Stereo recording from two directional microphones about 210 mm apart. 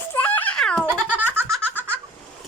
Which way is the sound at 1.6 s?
10° left (ahead or behind).